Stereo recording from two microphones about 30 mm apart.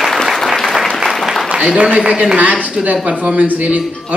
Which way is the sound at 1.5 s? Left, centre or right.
Right.